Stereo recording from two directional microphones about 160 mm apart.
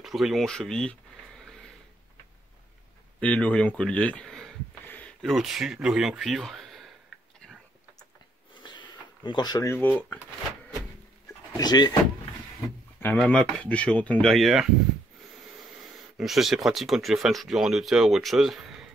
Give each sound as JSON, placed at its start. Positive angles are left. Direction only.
{"t": 0.0, "sound": "speech", "side_deg": 0}
{"t": 3.2, "sound": "a sound", "side_deg": 10}
{"t": 5.2, "sound": "speech", "side_deg": 0}
{"t": 8.6, "sound": "a sound", "side_deg": 30}
{"t": 9.7, "sound": "speech", "side_deg": 10}
{"t": 11.5, "sound": "speech", "side_deg": 25}
{"t": 13.0, "sound": "speech", "side_deg": 10}
{"t": 15.8, "sound": "speech", "side_deg": 0}